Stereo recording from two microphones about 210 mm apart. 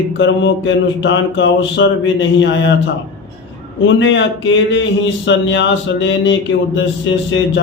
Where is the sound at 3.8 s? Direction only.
60° left (ahead or behind).